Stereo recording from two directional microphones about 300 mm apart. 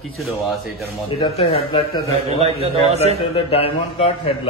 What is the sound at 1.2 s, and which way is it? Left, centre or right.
Speech, centre.